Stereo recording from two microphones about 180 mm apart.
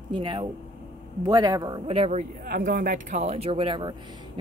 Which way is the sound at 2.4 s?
55° right (ahead or behind).